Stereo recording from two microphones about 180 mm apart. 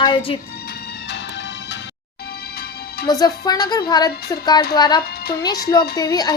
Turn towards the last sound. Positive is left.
turn(degrees=20)  # may be behind; listen again after turning